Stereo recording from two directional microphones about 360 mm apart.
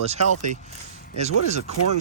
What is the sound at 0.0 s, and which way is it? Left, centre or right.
Speech, centre.